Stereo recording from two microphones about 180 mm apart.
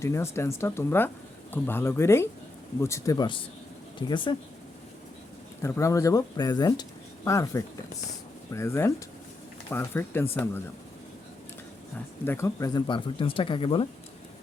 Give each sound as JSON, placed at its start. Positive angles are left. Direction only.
{"t": 0.0, "sound": "speech", "side_deg": 15}
{"t": 5.6, "sound": "speech", "side_deg": 15}
{"t": 12.2, "sound": "speech", "side_deg": 15}